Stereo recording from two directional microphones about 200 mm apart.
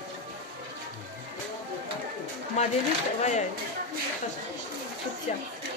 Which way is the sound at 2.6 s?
35° left (ahead or behind).